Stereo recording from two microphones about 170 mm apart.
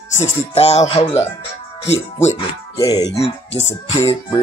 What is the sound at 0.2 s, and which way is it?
Music, 40° left (ahead or behind).